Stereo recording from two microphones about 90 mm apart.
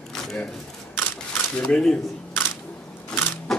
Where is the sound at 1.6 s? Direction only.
10° left (ahead or behind).